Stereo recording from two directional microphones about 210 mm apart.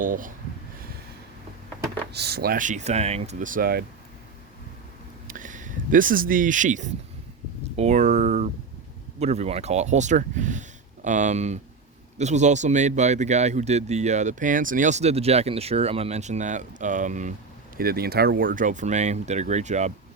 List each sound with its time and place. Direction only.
0.0 s speech: 40° right (ahead or behind)
2.1 s speech: 50° right (ahead or behind)
5.3 s speech: 40° right (ahead or behind)